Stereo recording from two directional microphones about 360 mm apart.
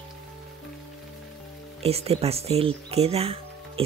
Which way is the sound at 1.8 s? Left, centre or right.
Centre.